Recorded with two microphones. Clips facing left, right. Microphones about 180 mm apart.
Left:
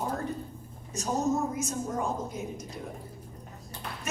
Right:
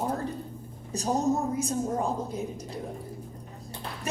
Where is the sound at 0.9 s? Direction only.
35° right (ahead or behind).